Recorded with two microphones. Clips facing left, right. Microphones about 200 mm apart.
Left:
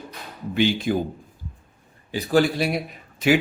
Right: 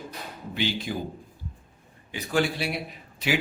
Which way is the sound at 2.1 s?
35° left (ahead or behind).